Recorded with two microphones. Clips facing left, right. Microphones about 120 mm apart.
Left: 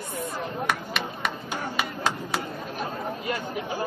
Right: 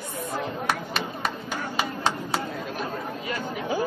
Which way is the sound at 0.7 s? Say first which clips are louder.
Right 1 dB; 35° right (ahead or behind).